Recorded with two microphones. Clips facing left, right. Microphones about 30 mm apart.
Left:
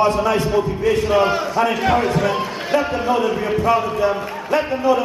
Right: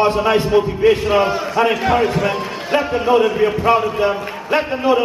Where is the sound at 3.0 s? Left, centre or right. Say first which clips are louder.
Right 5 dB; centre.